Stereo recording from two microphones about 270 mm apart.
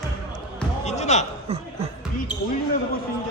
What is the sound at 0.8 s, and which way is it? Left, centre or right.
Basketball bounce, left.